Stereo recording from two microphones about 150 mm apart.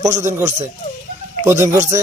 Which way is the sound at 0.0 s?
20° right (ahead or behind).